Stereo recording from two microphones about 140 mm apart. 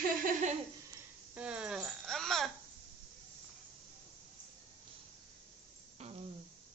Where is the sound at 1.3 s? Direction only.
5° right (ahead or behind).